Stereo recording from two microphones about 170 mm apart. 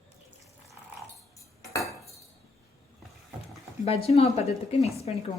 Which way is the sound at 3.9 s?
35° left (ahead or behind).